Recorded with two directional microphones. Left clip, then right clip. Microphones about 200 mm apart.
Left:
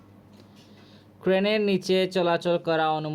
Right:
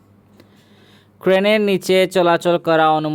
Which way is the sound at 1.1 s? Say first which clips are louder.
Right 9 dB; 45° right (ahead or behind).